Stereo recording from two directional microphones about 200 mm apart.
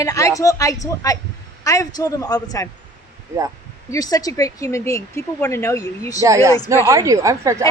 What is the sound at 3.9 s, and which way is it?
Speech, 20° left (ahead or behind).